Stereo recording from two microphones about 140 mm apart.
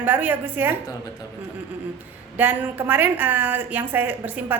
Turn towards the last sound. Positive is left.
turn(degrees=-10)  # may be behind; listen again after turning